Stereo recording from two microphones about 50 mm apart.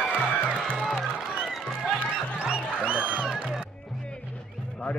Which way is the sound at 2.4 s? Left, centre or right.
Right.